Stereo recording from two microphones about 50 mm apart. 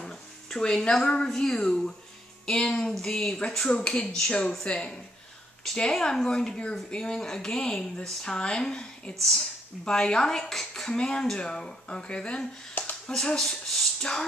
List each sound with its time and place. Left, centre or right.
0.5 s a woman's voice: centre
1.3 s speech: centre